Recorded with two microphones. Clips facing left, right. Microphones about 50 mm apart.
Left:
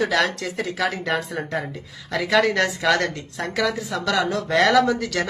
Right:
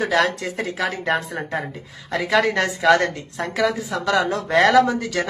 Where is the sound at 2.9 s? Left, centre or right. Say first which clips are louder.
Right 4 dB; centre.